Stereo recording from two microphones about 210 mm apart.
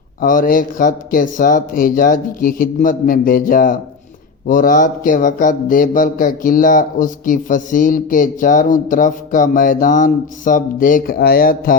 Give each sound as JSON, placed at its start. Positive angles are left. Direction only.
{"t": 0.2, "sound": "speech", "side_deg": 40}